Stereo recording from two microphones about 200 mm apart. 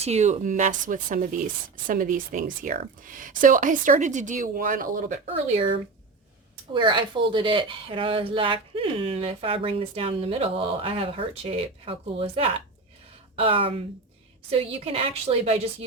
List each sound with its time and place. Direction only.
0.0 s a woman's voice: 35° right (ahead or behind)